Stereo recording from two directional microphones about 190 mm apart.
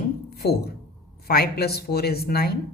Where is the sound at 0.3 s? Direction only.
60° left (ahead or behind).